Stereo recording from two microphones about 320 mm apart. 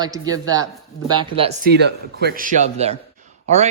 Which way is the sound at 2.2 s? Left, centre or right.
Right.